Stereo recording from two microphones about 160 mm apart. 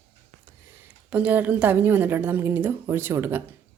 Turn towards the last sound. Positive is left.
turn(degrees=-15)  # may be behind; listen again after turning